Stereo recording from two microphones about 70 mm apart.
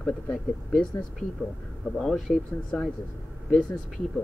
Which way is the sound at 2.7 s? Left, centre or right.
Centre.